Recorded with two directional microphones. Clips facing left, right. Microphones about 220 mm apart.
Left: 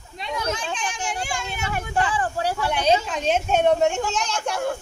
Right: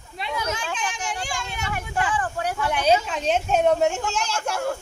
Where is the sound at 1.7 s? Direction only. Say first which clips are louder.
Left 2 dB; 30° left (ahead or behind).